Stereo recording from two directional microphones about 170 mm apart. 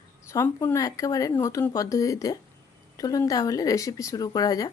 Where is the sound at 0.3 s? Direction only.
15° left (ahead or behind).